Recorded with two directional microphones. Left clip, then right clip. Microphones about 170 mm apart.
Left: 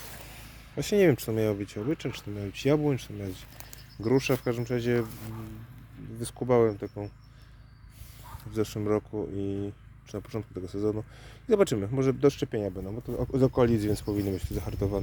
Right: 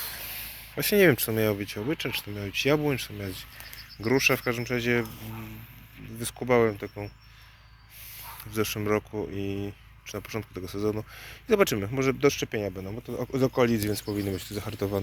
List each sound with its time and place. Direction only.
0.0 s a sound: 15° left (ahead or behind)
1.9 s speech: 25° left (ahead or behind)
6.1 s speech: 30° left (ahead or behind)
8.4 s speech: 20° left (ahead or behind)